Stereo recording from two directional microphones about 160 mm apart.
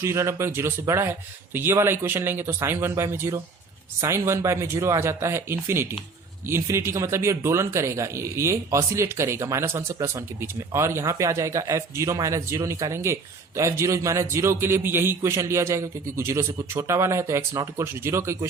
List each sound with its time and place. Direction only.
0.0 s a man's voice: 20° right (ahead or behind)